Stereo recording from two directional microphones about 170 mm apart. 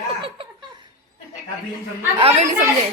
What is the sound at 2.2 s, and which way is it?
Speech, 40° right (ahead or behind).